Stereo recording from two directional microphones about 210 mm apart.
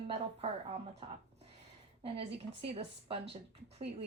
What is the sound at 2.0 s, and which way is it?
Speech, 25° right (ahead or behind).